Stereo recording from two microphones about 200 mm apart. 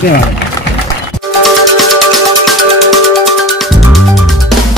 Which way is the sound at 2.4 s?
Centre (ahead or behind).